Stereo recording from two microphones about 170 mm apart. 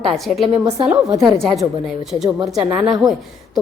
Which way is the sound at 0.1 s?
Centre (ahead or behind).